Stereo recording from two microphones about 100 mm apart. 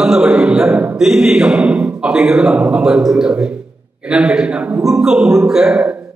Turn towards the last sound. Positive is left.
turn(degrees=-10)  # may be behind; listen again after turning